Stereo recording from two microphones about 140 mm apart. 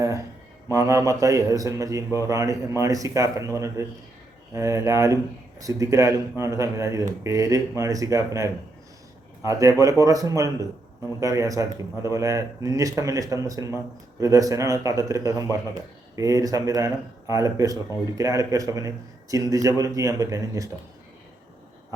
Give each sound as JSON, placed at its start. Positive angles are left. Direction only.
{"t": 0.7, "sound": "a man's voice", "side_deg": -20}